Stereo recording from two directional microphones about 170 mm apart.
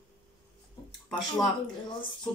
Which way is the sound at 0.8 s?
25° left (ahead or behind).